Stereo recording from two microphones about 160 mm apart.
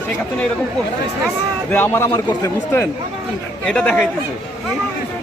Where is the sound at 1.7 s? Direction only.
15° left (ahead or behind).